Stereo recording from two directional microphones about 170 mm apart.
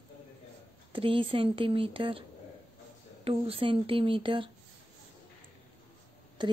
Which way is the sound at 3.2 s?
35° right (ahead or behind).